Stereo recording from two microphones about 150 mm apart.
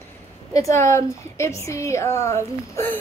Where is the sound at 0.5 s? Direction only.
20° left (ahead or behind).